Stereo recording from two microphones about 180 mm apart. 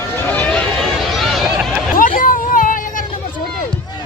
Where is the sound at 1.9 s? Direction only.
50° left (ahead or behind).